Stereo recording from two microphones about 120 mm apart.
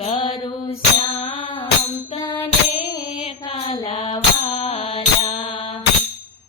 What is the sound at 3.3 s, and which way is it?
Mantra, 40° left (ahead or behind).